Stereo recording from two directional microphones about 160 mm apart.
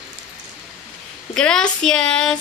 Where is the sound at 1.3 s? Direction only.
5° left (ahead or behind).